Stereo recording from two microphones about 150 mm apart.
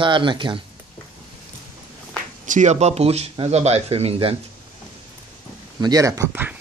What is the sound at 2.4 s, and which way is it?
Speech, 55° right (ahead or behind).